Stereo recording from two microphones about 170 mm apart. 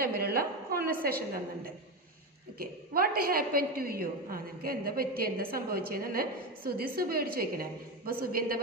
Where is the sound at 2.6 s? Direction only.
60° right (ahead or behind).